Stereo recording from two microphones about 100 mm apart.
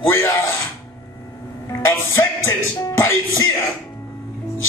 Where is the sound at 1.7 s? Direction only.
30° left (ahead or behind).